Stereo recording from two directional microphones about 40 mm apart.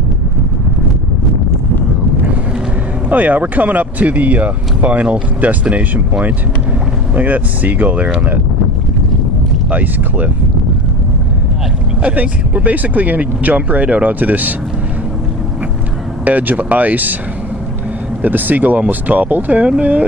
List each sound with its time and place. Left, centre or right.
3.1 s speech: right
7.2 s speech: right
9.7 s speech: right
12.1 s speech: right
16.3 s speech: right
18.2 s speech: right